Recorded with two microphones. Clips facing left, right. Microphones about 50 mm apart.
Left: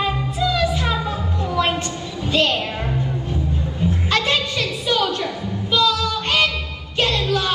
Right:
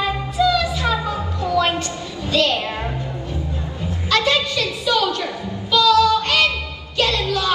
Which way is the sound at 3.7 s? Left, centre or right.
Left.